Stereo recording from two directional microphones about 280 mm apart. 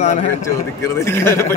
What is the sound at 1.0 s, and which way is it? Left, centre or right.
Speech, centre.